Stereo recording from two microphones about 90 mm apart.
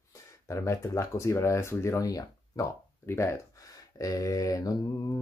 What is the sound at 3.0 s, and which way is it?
Speech, 30° left (ahead or behind).